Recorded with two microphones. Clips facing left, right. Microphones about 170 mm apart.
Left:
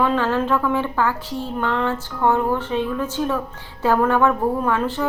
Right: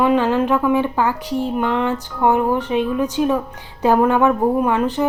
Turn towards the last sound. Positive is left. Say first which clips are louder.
# right 4 dB
turn(degrees=-15)  # may be behind; listen again after turning